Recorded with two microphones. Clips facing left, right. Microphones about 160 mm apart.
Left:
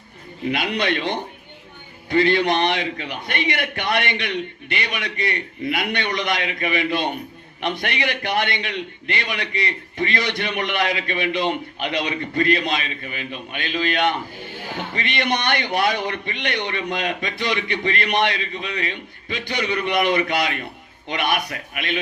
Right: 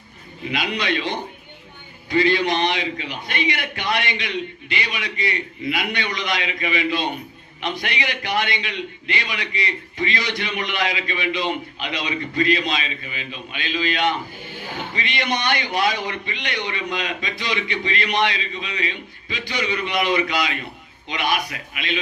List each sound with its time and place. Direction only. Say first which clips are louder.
0.5 s a man's voice: left 1 dB; 55° left (ahead or behind)